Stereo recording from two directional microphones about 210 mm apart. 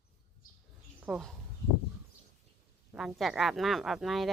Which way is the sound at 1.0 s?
5° right (ahead or behind).